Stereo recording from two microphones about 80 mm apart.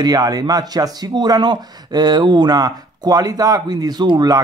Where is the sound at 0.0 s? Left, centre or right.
Right.